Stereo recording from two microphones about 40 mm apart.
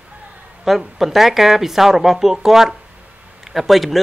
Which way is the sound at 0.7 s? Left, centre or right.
Centre.